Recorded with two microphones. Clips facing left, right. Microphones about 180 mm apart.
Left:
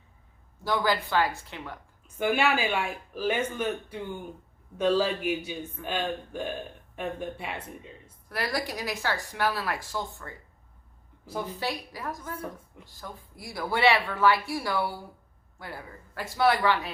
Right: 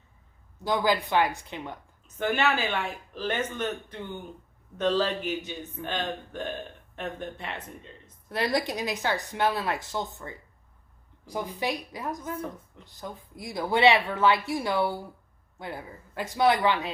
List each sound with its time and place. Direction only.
0.6 s speech: 15° right (ahead or behind)
2.0 s speech: 10° left (ahead or behind)
8.3 s speech: 20° right (ahead or behind)